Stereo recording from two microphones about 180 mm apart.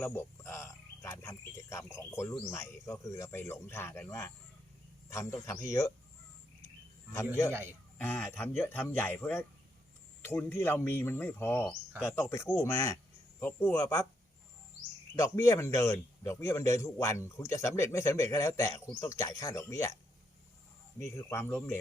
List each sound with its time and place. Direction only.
0.0 s a man's voice: 10° left (ahead or behind)
5.5 s a man's voice: 15° left (ahead or behind)
7.5 s speech: 10° right (ahead or behind)
7.9 s a man's voice: 10° left (ahead or behind)
15.1 s a man's voice: 15° left (ahead or behind)
21.0 s a man's voice: 15° left (ahead or behind)